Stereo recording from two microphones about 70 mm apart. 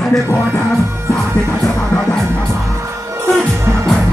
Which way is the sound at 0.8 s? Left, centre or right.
Right.